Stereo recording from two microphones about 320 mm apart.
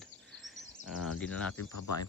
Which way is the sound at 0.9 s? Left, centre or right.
Left.